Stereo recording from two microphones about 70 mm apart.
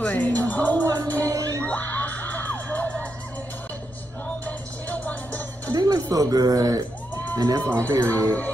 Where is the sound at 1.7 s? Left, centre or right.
Left.